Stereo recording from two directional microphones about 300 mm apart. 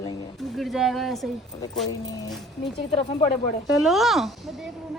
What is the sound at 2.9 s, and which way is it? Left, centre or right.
Speech, centre.